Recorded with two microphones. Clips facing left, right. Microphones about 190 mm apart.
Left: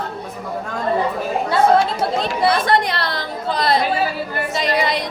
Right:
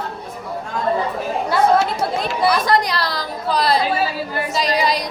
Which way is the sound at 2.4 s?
25° left (ahead or behind).